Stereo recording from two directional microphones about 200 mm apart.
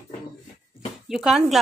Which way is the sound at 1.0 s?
Centre (ahead or behind).